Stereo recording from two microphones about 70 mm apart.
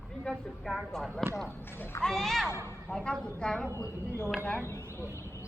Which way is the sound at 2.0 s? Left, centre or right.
Centre.